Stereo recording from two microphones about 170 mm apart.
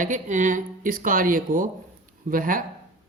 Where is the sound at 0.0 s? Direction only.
45° right (ahead or behind).